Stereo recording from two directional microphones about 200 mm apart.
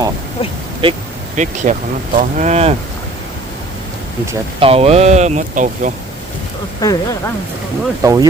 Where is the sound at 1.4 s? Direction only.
40° right (ahead or behind).